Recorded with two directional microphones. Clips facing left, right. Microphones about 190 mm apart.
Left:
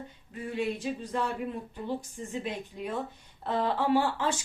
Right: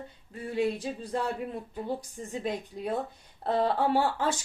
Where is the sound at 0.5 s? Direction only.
35° right (ahead or behind).